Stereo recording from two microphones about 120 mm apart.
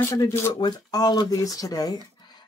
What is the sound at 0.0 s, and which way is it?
Speech, 25° left (ahead or behind).